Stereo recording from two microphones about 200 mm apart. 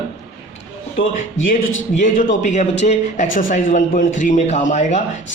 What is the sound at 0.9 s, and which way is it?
Speech, 75° left (ahead or behind).